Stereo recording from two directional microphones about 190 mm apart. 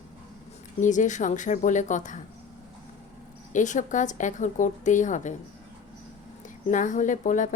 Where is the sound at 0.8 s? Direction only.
40° left (ahead or behind).